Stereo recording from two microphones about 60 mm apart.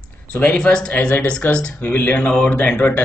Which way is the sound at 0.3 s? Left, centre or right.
Centre.